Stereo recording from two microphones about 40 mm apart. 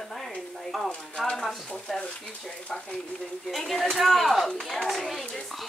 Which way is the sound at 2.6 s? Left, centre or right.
Left.